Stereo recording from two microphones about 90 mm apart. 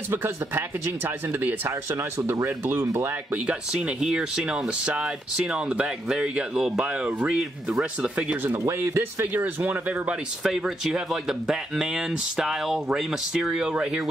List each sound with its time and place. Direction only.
0.1 s speech: 25° right (ahead or behind)
3.4 s speech: 10° right (ahead or behind)
7.3 s speech: 5° right (ahead or behind)
8.5 s speech: 30° right (ahead or behind)
10.4 s speech: 5° right (ahead or behind)